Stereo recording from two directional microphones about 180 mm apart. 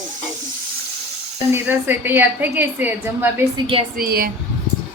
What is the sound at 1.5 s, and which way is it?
A woman's voice, 10° right (ahead or behind).